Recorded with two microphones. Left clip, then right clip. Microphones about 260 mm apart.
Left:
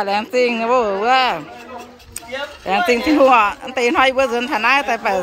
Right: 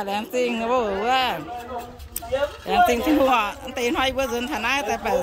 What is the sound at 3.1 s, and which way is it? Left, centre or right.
A woman's voice, centre.